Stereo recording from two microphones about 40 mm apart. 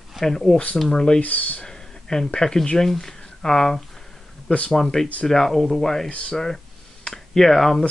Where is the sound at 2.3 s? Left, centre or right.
Centre.